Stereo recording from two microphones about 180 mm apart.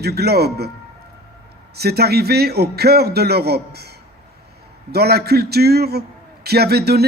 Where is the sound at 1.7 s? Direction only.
60° right (ahead or behind).